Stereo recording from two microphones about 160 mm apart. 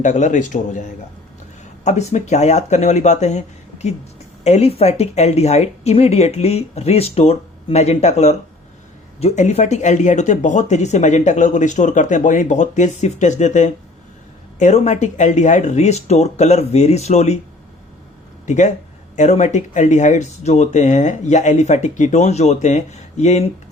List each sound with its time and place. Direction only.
0.0 s speech: 50° left (ahead or behind)
18.4 s speech: 50° left (ahead or behind)